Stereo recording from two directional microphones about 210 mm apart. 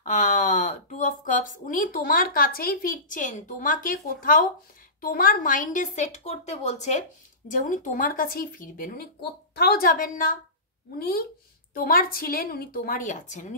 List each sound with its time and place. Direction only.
0.0 s a woman's voice: 35° left (ahead or behind)